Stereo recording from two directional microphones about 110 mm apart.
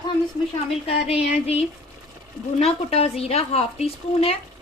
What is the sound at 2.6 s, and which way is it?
Speech, 70° left (ahead or behind).